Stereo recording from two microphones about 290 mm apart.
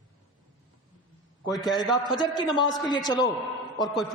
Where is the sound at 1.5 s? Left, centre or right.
Centre.